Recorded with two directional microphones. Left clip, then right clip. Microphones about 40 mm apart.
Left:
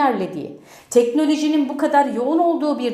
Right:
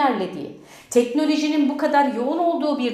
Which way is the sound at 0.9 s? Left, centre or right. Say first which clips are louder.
Left 3 dB; left.